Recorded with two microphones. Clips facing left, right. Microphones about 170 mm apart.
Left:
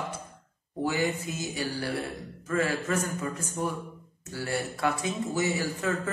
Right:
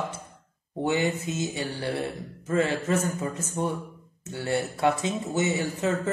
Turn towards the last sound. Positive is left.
turn(degrees=-25)  # may be behind; listen again after turning